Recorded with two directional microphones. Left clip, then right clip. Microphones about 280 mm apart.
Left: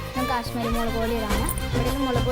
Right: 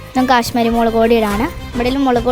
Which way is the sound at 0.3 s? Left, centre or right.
Right.